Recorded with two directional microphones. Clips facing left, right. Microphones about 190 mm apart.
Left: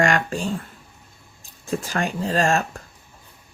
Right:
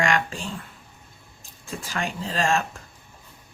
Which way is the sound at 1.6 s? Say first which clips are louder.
Left 6 dB; 45° left (ahead or behind).